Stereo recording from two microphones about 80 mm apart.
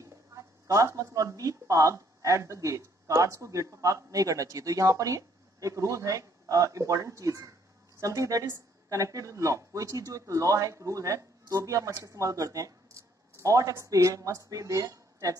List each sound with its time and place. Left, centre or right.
0.0 s a woman's voice: right